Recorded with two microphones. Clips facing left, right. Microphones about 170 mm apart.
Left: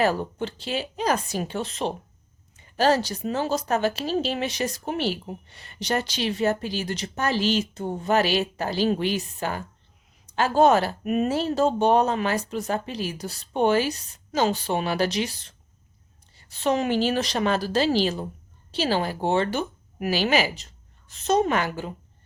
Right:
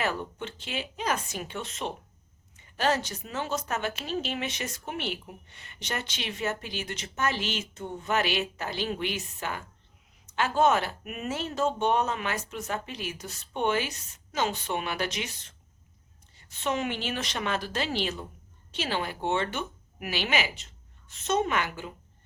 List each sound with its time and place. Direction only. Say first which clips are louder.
0.0 s speech: left 8 dB; 35° left (ahead or behind)